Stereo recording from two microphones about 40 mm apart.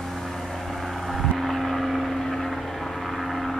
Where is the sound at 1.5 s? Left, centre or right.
Centre.